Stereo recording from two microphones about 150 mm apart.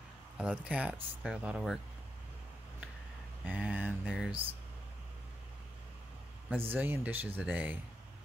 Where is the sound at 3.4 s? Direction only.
10° right (ahead or behind).